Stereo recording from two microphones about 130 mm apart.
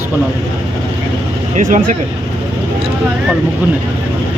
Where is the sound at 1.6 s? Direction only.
85° right.